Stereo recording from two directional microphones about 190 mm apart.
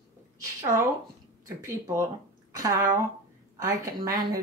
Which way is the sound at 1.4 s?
15° right (ahead or behind).